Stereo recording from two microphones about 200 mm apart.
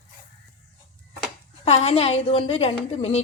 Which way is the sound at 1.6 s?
30° left (ahead or behind).